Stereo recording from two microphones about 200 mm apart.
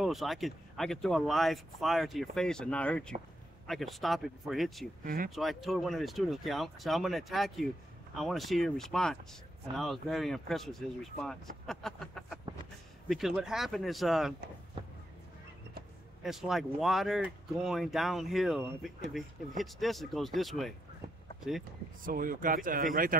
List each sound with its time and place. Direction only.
0.0 s speech: centre (ahead or behind)
5.0 s speech: 45° right (ahead or behind)
5.3 s speech: centre (ahead or behind)
16.2 s speech: centre (ahead or behind)
22.0 s speech: 45° right (ahead or behind)